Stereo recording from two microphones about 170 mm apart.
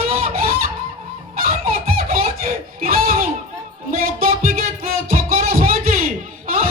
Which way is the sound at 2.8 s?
60° right (ahead or behind).